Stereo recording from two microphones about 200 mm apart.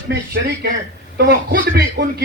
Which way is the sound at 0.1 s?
55° right (ahead or behind).